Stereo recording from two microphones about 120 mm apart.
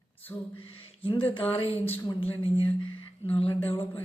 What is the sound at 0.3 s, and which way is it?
Speech, 20° left (ahead or behind).